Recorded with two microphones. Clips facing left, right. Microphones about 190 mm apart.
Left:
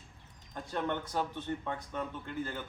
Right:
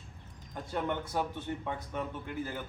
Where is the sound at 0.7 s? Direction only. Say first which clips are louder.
Right 1 dB; 10° right (ahead or behind).